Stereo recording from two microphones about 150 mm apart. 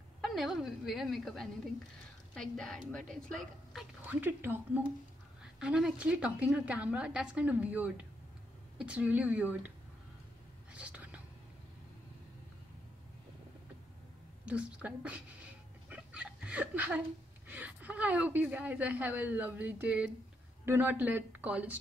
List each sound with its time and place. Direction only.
0.2 s a woman's voice: centre (ahead or behind)
4.0 s a woman's voice: 10° right (ahead or behind)
10.7 s whispering: 10° right (ahead or behind)
14.4 s a woman's voice: 10° right (ahead or behind)
15.9 s a sound: 10° right (ahead or behind)
17.5 s a woman's voice: 10° right (ahead or behind)